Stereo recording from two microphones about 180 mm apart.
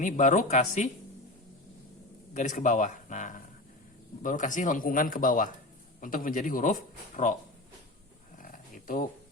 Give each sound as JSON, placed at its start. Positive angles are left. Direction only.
{"t": 0.0, "sound": "speech", "side_deg": 45}
{"t": 2.3, "sound": "speech", "side_deg": 45}
{"t": 8.4, "sound": "dog", "side_deg": 45}